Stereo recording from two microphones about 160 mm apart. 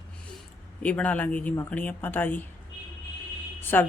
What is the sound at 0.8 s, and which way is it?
Speech, 10° left (ahead or behind).